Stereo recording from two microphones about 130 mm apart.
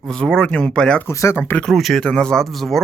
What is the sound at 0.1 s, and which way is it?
Speech, 5° left (ahead or behind).